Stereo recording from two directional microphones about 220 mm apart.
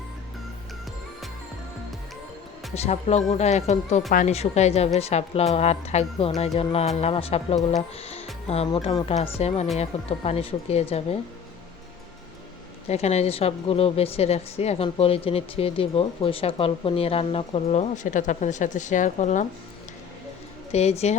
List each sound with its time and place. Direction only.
2.7 s a woman's voice: 30° left (ahead or behind)
12.9 s a woman's voice: 30° left (ahead or behind)
20.7 s a woman's voice: 30° left (ahead or behind)